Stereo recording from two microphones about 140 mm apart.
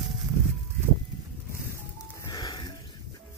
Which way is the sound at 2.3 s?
30° left (ahead or behind).